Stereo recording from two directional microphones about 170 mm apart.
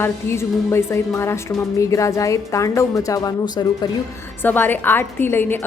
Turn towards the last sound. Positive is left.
turn(degrees=10)  # may be behind; listen again after turning